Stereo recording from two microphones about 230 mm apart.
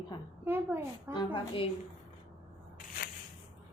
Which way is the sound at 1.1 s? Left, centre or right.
Left.